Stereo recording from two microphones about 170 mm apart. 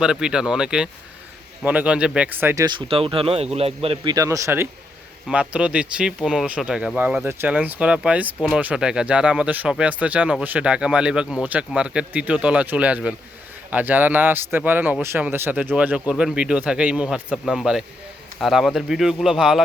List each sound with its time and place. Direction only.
0.0 s speech: 5° right (ahead or behind)
2.6 s speech: 30° right (ahead or behind); by 19.6 s centre (ahead or behind)